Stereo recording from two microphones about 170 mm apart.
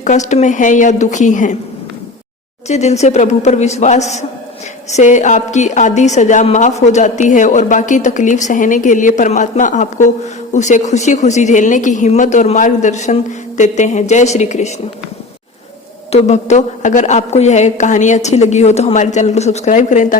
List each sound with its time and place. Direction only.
0.0 s a woman's voice: 45° left (ahead or behind)
2.6 s a woman's voice: 40° left (ahead or behind)
16.1 s a woman's voice: 40° left (ahead or behind)